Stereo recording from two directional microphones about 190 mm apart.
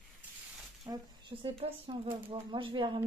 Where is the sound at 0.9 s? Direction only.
25° right (ahead or behind).